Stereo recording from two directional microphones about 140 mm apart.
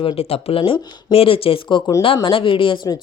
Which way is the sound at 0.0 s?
45° left (ahead or behind).